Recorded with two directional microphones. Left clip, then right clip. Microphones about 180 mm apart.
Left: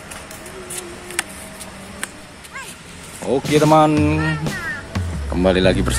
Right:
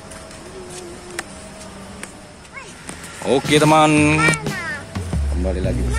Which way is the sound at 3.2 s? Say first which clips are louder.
Right 1 dB; 5° left (ahead or behind).